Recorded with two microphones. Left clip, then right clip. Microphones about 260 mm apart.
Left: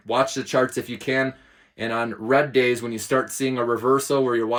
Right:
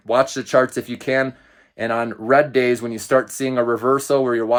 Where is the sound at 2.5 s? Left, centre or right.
Centre.